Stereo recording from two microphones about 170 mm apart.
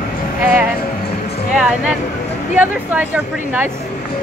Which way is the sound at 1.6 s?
5° right (ahead or behind).